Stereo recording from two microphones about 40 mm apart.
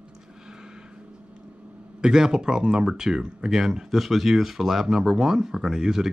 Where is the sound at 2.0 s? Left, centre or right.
Centre.